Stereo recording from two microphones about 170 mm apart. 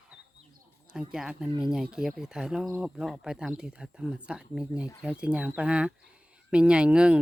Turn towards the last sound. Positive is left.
turn(degrees=-5)  # may be behind; listen again after turning